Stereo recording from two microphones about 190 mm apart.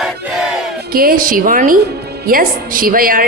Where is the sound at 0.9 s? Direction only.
50° right (ahead or behind).